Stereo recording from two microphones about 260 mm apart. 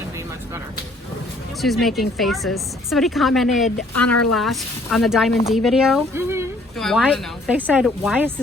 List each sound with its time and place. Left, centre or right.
1.6 s speech: centre
3.9 s speech: left
4.4 s speech: centre